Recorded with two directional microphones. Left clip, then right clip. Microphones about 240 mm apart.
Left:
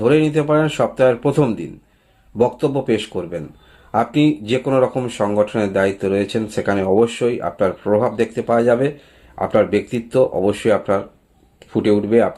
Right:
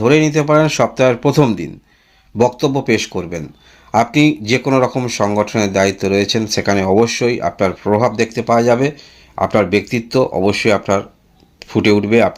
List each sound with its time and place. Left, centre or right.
0.0 s speech: right